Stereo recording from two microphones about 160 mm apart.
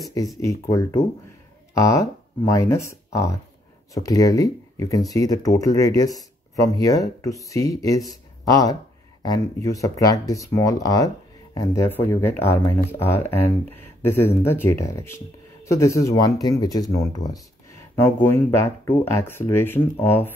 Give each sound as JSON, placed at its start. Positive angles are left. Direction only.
{"t": 0.4, "sound": "speech", "side_deg": 20}